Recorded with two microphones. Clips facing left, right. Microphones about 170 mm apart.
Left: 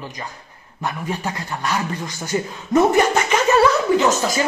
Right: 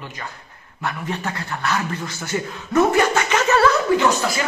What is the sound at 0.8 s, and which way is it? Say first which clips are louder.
A man's voice: left 1 dB; 15° left (ahead or behind).